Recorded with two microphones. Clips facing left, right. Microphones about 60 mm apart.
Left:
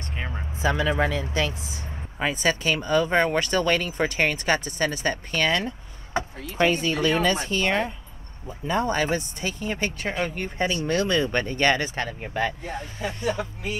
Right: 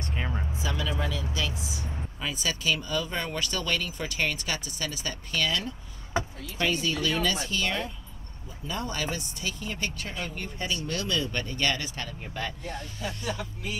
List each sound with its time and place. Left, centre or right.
0.6 s speech: left